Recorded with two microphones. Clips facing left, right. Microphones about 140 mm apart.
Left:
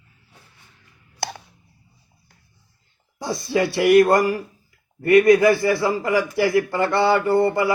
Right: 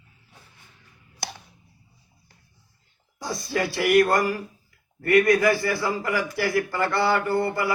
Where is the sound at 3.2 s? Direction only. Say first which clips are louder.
Left 5 dB; 25° left (ahead or behind).